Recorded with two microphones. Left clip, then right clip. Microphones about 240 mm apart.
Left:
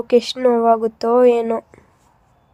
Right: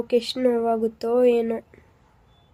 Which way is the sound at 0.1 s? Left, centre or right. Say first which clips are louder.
Left 7 dB; left.